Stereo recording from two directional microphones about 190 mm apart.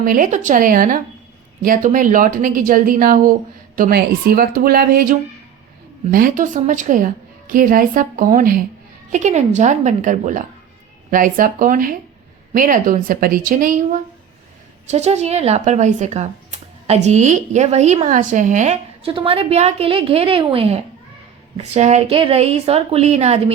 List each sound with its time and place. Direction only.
0.0 s a woman's voice: 45° right (ahead or behind)